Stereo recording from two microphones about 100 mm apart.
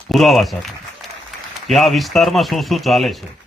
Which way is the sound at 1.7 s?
Centre (ahead or behind).